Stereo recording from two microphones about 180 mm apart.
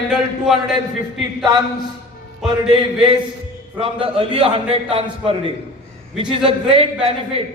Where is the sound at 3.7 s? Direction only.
30° right (ahead or behind).